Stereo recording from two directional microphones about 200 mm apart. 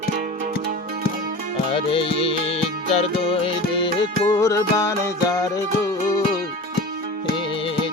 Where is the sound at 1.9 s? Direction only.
25° left (ahead or behind).